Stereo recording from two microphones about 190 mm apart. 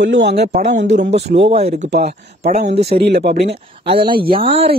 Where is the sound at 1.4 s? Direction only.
30° right (ahead or behind).